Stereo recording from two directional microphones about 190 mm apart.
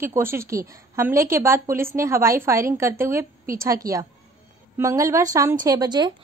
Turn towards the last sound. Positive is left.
turn(degrees=-20)  # may be behind; listen again after turning